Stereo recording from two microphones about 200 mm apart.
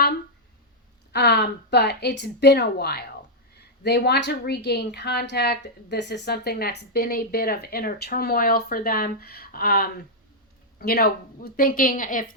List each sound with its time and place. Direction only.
1.1 s a woman's voice: 55° left (ahead or behind)